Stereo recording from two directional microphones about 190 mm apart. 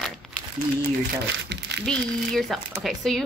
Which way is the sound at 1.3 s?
65° right (ahead or behind).